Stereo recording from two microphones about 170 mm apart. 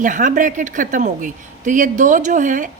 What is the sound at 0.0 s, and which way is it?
A woman's voice, 50° right (ahead or behind).